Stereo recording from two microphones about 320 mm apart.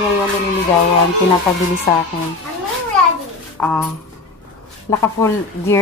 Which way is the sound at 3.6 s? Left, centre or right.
Centre.